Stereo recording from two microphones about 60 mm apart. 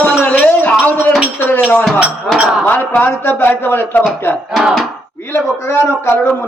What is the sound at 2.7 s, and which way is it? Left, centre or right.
Speech, left.